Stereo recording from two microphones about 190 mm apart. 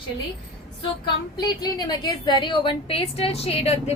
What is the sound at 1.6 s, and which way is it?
A woman's voice, 20° left (ahead or behind).